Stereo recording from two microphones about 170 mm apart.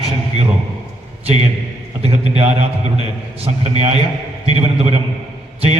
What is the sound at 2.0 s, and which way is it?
Speech, 35° right (ahead or behind).